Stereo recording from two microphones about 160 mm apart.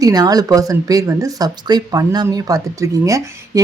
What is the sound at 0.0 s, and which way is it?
Speech, 25° right (ahead or behind).